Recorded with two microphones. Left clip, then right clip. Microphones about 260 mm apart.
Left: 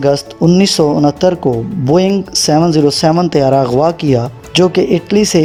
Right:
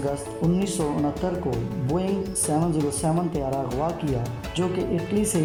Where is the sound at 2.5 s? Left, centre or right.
Left.